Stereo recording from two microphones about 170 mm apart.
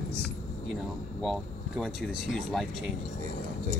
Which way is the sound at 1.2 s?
Centre (ahead or behind).